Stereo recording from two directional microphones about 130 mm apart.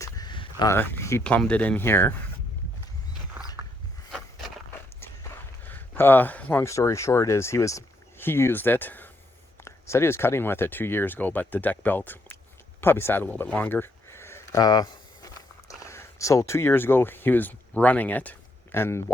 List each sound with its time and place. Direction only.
0.0 s a sound: 30° left (ahead or behind)
0.7 s speech: 15° left (ahead or behind)
1.2 s speech: 10° left (ahead or behind)
5.6 s speech: 15° left (ahead or behind)
14.6 s walk: 30° left (ahead or behind)
15.9 s speech: 20° left (ahead or behind)